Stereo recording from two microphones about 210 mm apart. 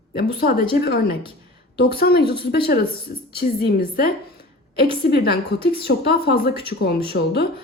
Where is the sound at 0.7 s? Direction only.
45° left (ahead or behind).